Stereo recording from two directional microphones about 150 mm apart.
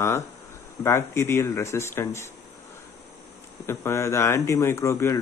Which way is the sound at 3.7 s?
15° left (ahead or behind).